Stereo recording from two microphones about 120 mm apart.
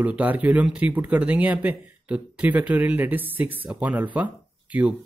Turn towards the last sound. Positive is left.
turn(degrees=-10)  # may be behind; listen again after turning